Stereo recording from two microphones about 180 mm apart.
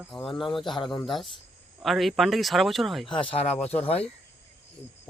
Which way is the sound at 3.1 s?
30° left (ahead or behind).